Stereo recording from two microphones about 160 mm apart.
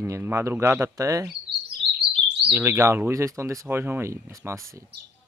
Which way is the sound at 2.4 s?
15° right (ahead or behind).